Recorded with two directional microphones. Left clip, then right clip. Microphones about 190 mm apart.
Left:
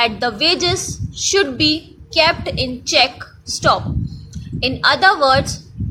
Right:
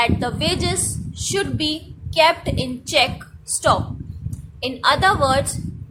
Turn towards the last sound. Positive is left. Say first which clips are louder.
# left 4 dB
turn(degrees=15)  # may be behind; listen again after turning